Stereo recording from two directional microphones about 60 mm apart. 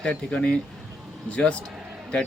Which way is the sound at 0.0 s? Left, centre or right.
Centre.